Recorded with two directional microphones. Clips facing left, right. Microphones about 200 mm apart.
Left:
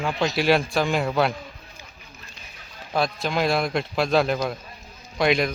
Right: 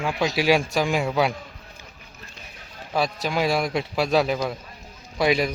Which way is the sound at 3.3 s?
10° right (ahead or behind).